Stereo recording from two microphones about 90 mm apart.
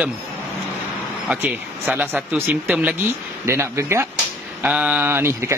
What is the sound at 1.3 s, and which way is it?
Speech, 15° right (ahead or behind).